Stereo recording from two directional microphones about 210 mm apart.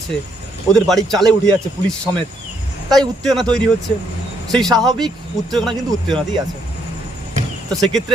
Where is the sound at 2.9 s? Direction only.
Centre (ahead or behind).